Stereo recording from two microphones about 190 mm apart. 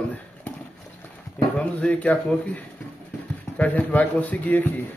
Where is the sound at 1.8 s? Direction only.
5° left (ahead or behind).